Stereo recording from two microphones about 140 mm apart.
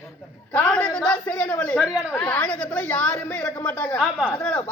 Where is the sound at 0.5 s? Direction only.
5° left (ahead or behind).